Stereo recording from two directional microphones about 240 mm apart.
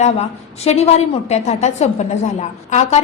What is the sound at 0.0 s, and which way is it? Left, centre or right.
A woman's voice, left.